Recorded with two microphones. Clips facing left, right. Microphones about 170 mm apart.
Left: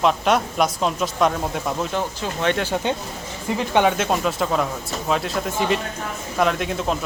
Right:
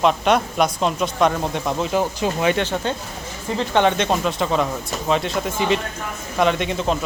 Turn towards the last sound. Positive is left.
turn(degrees=0)  # may be behind; listen again after turning